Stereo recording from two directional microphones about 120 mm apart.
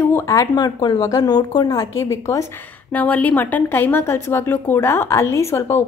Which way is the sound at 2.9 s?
15° left (ahead or behind).